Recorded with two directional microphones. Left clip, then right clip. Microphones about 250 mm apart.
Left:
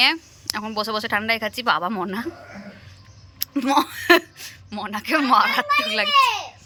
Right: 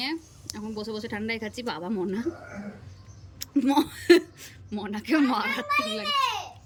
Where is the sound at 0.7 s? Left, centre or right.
Centre.